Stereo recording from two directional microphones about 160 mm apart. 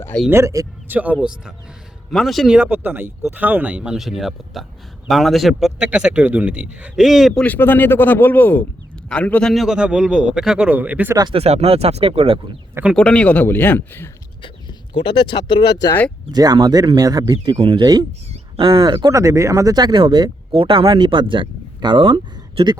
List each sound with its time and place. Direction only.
0.3 s a man's voice: 15° right (ahead or behind); by 7.4 s centre (ahead or behind)
7.4 s a man's voice: 10° left (ahead or behind); by 11.2 s 10° right (ahead or behind)
11.2 s speech: 35° right (ahead or behind)
12.9 s speech: 5° left (ahead or behind)
14.4 s speech: 35° left (ahead or behind)
16.3 s speech: 25° right (ahead or behind)